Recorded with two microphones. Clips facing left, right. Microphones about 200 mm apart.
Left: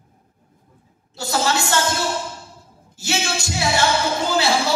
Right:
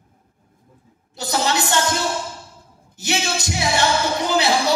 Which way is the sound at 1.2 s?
20° right (ahead or behind).